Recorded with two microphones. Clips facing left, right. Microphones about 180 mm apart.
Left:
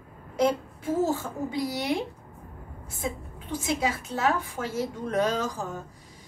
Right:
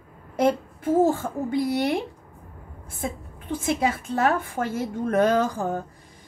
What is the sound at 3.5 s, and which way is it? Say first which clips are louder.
A woman's voice: right 4 dB; 55° right (ahead or behind).